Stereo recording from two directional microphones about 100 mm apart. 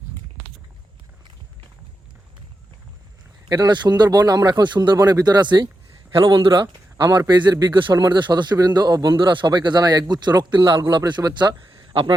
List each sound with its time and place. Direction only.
3.5 s speech: 45° right (ahead or behind)